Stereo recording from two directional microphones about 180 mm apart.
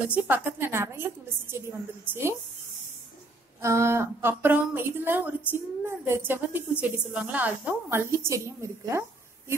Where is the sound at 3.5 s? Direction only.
15° right (ahead or behind).